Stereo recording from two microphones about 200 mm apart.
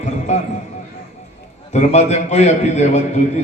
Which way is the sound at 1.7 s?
35° left (ahead or behind).